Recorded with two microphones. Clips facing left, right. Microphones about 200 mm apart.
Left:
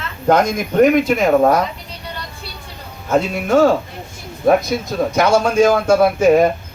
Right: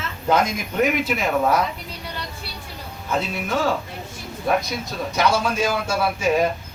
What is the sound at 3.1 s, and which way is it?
Speech, 50° left (ahead or behind).